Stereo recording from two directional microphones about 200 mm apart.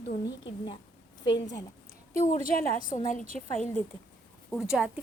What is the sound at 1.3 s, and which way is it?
Speech, 60° left (ahead or behind).